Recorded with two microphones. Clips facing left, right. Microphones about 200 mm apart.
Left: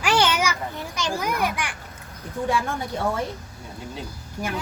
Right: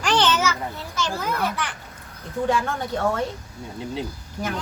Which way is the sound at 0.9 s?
15° left (ahead or behind).